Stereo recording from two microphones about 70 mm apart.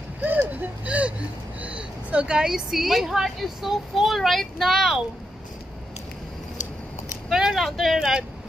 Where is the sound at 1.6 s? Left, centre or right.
Centre.